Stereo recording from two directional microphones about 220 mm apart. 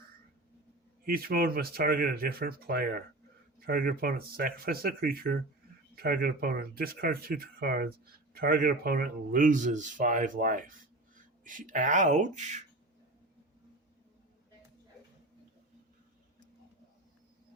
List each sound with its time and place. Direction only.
1.0 s speech: 40° right (ahead or behind)